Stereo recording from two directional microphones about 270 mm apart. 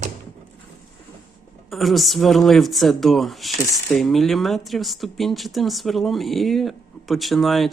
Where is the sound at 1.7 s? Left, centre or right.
Centre.